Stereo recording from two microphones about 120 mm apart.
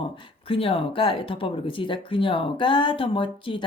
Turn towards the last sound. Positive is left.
turn(degrees=45)  # may be behind; listen again after turning